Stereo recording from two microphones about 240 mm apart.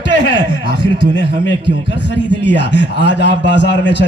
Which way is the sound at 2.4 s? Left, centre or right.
Left.